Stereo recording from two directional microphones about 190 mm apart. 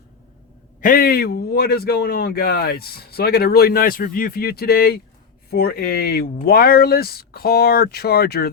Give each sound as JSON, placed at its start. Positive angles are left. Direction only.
{"t": 0.8, "sound": "speech", "side_deg": 50}